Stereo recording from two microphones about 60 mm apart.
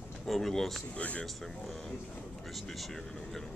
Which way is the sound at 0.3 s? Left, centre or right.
Centre.